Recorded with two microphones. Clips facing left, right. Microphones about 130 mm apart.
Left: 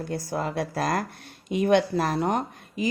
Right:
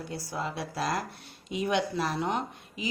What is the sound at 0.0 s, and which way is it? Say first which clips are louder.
Speech: left 6 dB; 50° left (ahead or behind).